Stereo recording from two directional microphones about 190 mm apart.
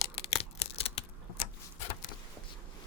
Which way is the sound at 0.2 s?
30° left (ahead or behind).